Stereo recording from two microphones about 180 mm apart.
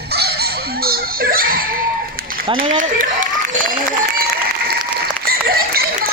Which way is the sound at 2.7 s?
45° right (ahead or behind).